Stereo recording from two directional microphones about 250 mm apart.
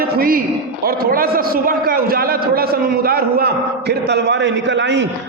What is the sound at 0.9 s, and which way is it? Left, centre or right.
A man's voice, right.